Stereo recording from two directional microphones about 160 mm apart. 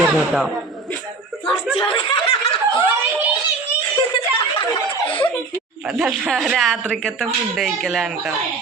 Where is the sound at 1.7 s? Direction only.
35° left (ahead or behind).